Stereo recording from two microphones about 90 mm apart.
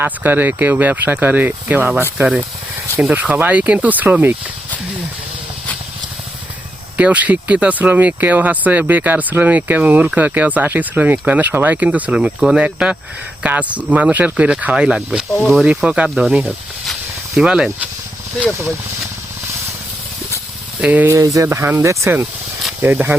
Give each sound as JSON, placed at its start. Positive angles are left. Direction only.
{"t": 0.0, "sound": "speech", "side_deg": -20}
{"t": 3.0, "sound": "speech", "side_deg": -20}
{"t": 6.9, "sound": "speech", "side_deg": -15}
{"t": 16.0, "sound": "speech", "side_deg": 0}
{"t": 17.3, "sound": "speech", "side_deg": -10}
{"t": 20.8, "sound": "speech", "side_deg": -20}
{"t": 21.1, "sound": "speech", "side_deg": -40}